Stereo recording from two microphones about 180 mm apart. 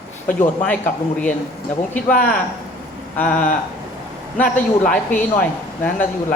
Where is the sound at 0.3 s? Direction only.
10° left (ahead or behind).